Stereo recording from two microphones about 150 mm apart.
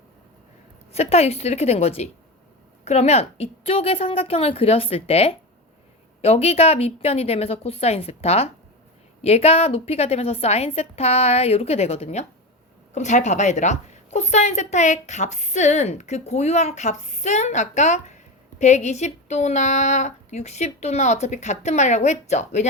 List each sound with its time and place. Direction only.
0.9 s a woman's voice: 45° left (ahead or behind)